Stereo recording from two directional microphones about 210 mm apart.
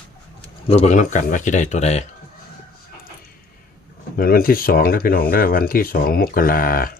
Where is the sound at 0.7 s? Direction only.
30° left (ahead or behind).